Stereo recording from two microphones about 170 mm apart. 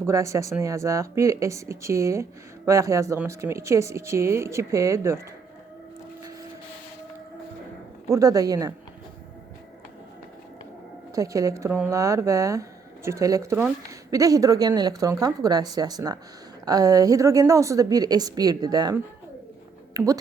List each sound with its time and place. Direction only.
0.0 s speech: 15° right (ahead or behind)
8.1 s speech: 20° right (ahead or behind)
11.1 s speech: 20° right (ahead or behind)